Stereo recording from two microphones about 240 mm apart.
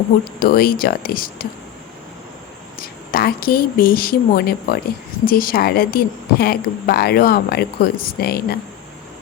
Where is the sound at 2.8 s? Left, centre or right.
Left.